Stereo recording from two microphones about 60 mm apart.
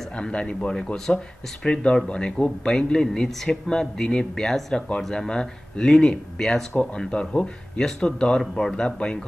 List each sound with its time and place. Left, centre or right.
0.2 s speech: centre